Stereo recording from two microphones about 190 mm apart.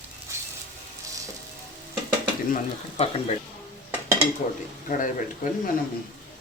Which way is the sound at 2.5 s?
35° left (ahead or behind).